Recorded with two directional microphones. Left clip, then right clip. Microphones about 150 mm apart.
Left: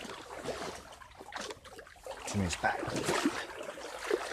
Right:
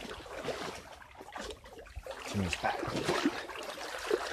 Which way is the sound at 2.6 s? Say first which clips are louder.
Left 2 dB; 20° left (ahead or behind).